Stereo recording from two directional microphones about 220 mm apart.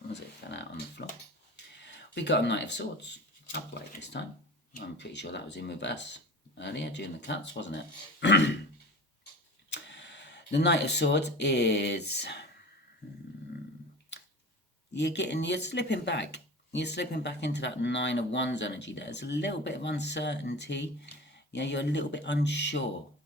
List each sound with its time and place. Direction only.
0.1 s a sound: 55° left (ahead or behind)
4.0 s speech: 50° left (ahead or behind)
9.6 s speech: 55° left (ahead or behind)
14.9 s speech: 50° left (ahead or behind)